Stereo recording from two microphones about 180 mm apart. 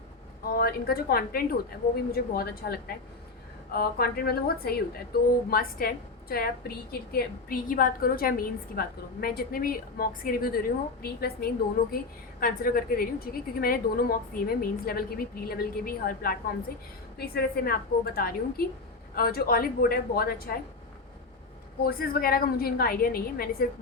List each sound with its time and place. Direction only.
0.6 s a woman's voice: 55° left (ahead or behind)
21.8 s a woman's voice: 55° left (ahead or behind)